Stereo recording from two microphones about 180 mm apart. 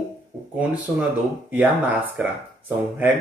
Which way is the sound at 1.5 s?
10° right (ahead or behind).